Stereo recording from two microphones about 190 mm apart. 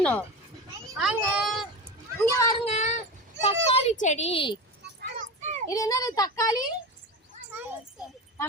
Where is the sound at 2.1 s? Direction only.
15° left (ahead or behind).